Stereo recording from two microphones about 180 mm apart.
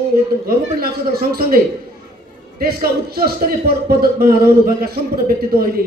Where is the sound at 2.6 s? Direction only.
55° right (ahead or behind).